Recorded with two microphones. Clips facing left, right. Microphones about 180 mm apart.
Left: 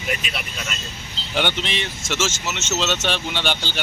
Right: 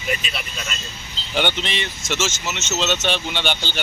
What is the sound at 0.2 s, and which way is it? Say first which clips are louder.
Speech: left 1 dB; 10° left (ahead or behind).